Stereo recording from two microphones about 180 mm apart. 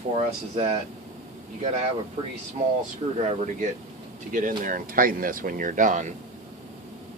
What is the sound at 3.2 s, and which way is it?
Speech, 45° right (ahead or behind).